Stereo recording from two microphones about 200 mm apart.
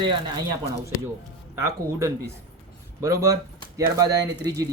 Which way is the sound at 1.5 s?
15° right (ahead or behind).